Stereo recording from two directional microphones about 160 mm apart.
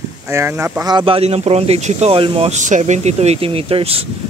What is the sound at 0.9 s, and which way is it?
Speech, 35° right (ahead or behind).